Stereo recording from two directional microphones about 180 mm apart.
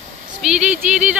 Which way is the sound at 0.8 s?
40° right (ahead or behind).